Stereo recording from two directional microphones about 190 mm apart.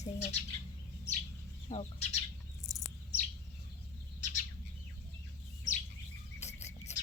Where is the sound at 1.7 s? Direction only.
40° left (ahead or behind).